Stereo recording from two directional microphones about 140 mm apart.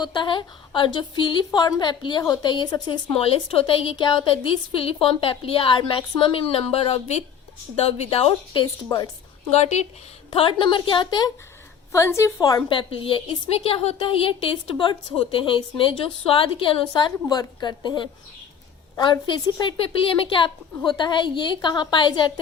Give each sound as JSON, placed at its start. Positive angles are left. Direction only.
{"t": 0.0, "sound": "a woman's voice", "side_deg": 35}
{"t": 3.2, "sound": "a woman's voice", "side_deg": 40}
{"t": 10.3, "sound": "a woman's voice", "side_deg": 40}
{"t": 11.9, "sound": "a woman's voice", "side_deg": 20}